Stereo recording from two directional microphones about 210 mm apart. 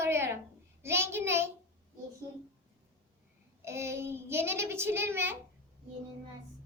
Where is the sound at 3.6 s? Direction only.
10° right (ahead or behind).